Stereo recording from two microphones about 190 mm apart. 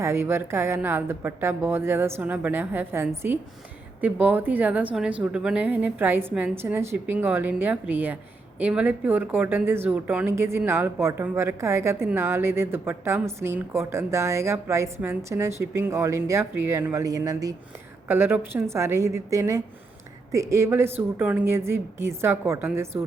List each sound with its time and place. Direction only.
0.0 s a woman's voice: 15° right (ahead or behind)